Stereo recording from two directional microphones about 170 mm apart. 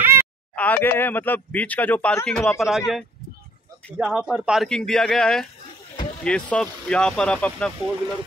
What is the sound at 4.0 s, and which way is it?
Speech, centre (ahead or behind).